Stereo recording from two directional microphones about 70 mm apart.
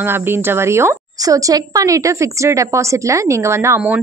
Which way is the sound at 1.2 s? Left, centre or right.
Right.